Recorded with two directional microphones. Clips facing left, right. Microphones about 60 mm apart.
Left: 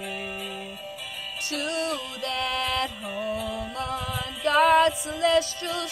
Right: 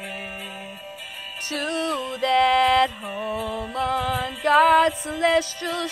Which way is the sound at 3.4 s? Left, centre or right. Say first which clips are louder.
Right 5 dB; right.